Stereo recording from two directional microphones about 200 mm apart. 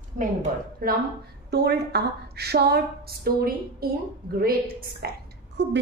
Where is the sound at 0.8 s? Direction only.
45° right (ahead or behind).